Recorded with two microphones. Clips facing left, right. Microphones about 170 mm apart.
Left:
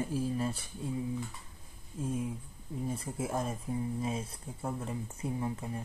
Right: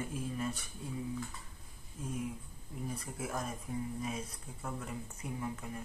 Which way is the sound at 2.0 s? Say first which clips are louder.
Left 4 dB; 30° left (ahead or behind).